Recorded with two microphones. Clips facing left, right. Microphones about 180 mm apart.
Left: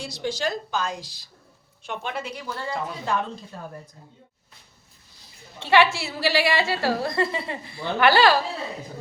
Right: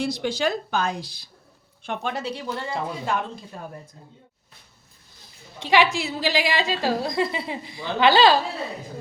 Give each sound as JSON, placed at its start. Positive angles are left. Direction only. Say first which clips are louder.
{"t": 0.0, "sound": "speech", "louder": "right 4 dB", "side_deg": -55}
{"t": 1.8, "sound": "speech", "louder": "right 3 dB", "side_deg": -50}
{"t": 2.5, "sound": "speech", "louder": "left 1 dB", "side_deg": -20}
{"t": 5.5, "sound": "a woman's voice", "louder": "left 1 dB", "side_deg": -15}